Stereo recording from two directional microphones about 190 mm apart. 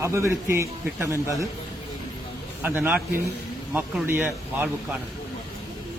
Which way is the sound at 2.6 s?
10° right (ahead or behind).